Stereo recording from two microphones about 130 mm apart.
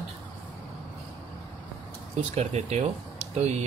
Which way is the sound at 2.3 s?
55° right (ahead or behind).